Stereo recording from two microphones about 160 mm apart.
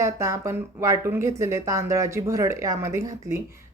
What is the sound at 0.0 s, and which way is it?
Speech, 20° right (ahead or behind).